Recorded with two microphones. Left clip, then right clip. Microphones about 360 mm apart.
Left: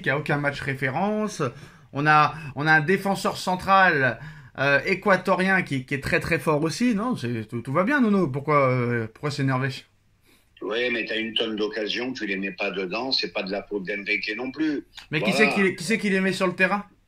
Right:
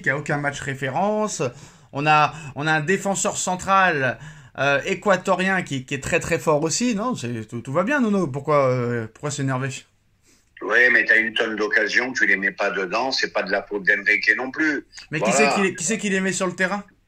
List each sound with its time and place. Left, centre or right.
0.0 s a man's voice: centre
10.6 s a man's voice: right
15.9 s speech: centre